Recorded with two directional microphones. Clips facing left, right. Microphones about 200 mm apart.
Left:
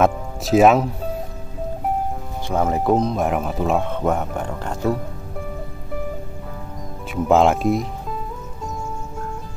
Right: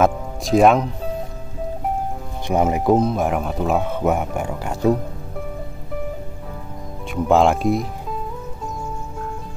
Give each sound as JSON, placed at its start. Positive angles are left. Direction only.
{"t": 0.0, "sound": "speech", "side_deg": 5}
{"t": 2.4, "sound": "speech", "side_deg": -15}
{"t": 7.1, "sound": "speech", "side_deg": 0}